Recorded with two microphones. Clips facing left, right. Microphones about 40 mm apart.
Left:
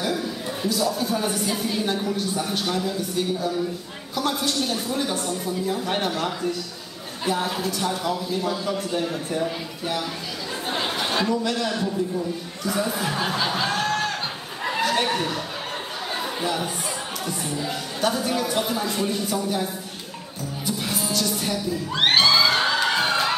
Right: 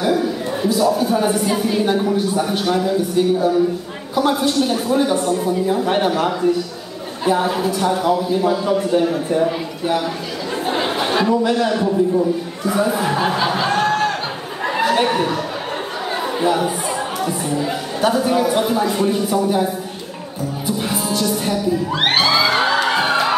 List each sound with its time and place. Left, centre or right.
0.0 s a sound: centre
0.6 s speech: centre
10.7 s a sound: centre
14.7 s chatter: centre
16.3 s speech: centre
20.6 s music: centre